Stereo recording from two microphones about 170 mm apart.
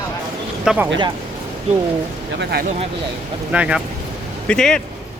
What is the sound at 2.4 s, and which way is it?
Speech, 70° right (ahead or behind).